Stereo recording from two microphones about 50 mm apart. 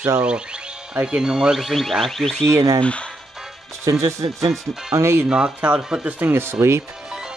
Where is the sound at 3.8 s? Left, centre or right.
Right.